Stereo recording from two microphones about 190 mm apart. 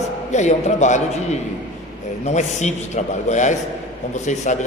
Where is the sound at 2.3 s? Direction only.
40° left (ahead or behind).